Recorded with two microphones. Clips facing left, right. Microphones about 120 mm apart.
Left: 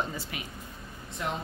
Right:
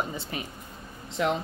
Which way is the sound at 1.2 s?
90° right.